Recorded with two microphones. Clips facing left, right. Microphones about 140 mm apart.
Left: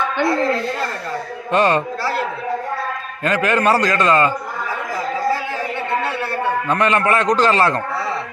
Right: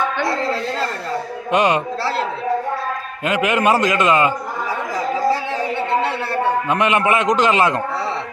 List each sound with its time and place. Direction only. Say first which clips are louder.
1.5 s a man's voice: left 1 dB; 15° right (ahead or behind)
3.2 s a man's voice: even; 20° right (ahead or behind)
6.0 s a sound: right 2 dB; 25° right (ahead or behind)
6.7 s a man's voice: left 3 dB; 15° right (ahead or behind)